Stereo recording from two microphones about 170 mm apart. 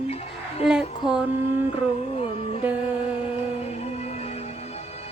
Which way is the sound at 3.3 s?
40° left (ahead or behind).